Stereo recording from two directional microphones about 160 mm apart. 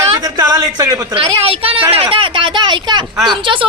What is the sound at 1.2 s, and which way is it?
A woman's voice, 35° right (ahead or behind).